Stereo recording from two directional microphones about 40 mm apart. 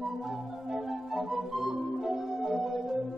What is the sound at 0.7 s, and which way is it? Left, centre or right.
Music, centre.